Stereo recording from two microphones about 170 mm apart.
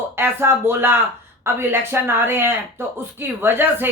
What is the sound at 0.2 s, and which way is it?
Speech, 15° right (ahead or behind).